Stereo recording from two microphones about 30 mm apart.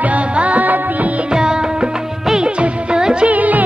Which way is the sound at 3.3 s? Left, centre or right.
Right.